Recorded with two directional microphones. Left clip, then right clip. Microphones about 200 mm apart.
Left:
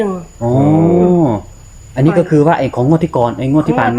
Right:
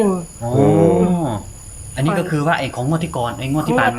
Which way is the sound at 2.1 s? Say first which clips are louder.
Left 7 dB; 30° left (ahead or behind).